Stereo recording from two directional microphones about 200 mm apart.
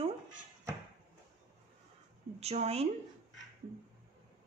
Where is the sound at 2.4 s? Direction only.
30° right (ahead or behind).